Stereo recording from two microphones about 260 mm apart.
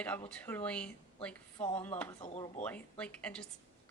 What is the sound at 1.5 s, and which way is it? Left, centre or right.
Speech, centre.